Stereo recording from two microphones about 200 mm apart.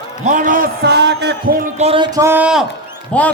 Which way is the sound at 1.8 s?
25° right (ahead or behind).